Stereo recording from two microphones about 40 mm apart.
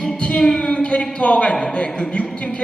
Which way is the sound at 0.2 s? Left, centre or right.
Left.